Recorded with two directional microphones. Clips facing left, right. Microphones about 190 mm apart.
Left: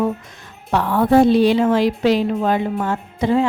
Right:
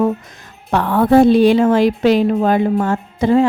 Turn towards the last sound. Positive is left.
turn(degrees=-45)  # may be behind; listen again after turning